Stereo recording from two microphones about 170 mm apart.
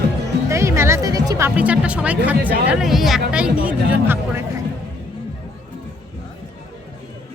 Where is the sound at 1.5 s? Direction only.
10° right (ahead or behind).